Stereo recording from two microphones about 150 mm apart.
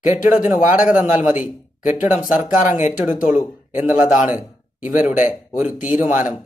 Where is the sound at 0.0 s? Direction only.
60° left (ahead or behind).